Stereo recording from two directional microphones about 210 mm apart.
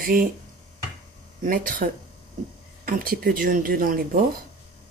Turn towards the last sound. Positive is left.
turn(degrees=-40)  # may be behind; listen again after turning